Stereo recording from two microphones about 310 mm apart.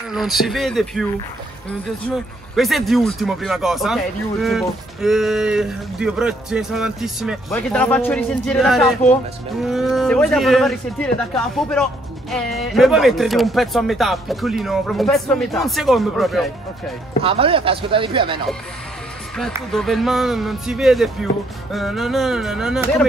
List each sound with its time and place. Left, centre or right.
0.1 s speech: centre
2.5 s speech: centre
17.2 s speech: centre
19.3 s speech: centre